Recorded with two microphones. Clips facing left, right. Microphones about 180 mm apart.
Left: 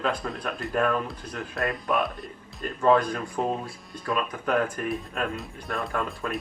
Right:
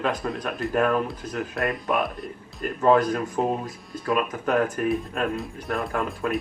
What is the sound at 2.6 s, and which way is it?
Speech, 40° right (ahead or behind).